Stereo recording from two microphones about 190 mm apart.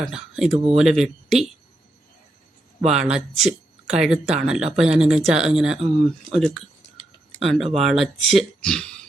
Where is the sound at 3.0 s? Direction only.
5° right (ahead or behind).